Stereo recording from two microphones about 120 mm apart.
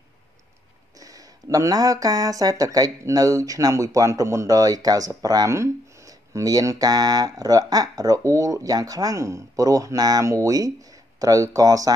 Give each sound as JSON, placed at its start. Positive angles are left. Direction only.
{"t": 0.9, "sound": "speech", "side_deg": -30}